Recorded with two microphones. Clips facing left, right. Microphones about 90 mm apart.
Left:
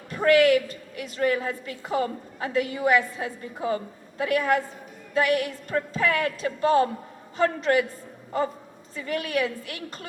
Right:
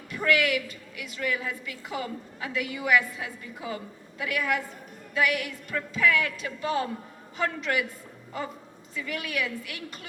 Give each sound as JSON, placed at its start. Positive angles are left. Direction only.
{"t": 0.1, "sound": "a woman's voice", "side_deg": 40}